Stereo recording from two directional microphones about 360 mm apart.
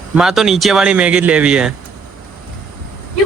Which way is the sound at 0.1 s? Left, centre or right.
Centre.